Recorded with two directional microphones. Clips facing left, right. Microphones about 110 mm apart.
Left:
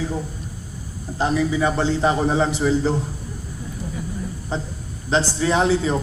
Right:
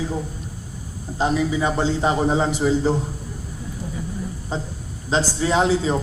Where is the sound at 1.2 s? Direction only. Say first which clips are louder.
Left 1 dB; 15° right (ahead or behind).